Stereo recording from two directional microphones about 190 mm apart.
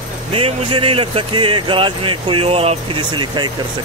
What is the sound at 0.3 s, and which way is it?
Speech, 30° right (ahead or behind).